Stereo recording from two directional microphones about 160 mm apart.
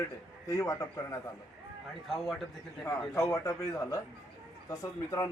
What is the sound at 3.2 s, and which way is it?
A man's voice, 20° left (ahead or behind).